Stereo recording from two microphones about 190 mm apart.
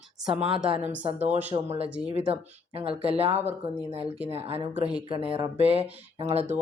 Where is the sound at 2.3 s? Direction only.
30° right (ahead or behind).